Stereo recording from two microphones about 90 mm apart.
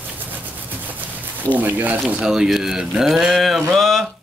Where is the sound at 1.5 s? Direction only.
20° right (ahead or behind).